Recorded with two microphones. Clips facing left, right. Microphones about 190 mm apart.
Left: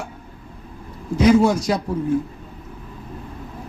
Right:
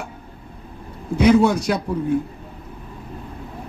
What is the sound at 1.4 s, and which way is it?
Speech, 60° right (ahead or behind).